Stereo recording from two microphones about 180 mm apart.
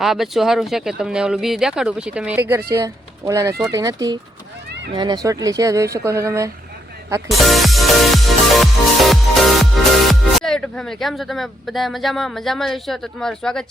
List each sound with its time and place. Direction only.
0.0 s speech: centre (ahead or behind)
7.3 s music: centre (ahead or behind)